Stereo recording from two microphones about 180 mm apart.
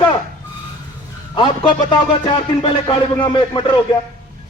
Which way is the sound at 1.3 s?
25° left (ahead or behind).